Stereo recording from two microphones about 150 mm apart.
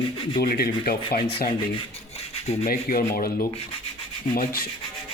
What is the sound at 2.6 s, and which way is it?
Speech, 75° left (ahead or behind).